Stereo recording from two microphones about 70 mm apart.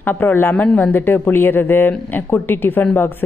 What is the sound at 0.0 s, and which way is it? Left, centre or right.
A woman's voice, left.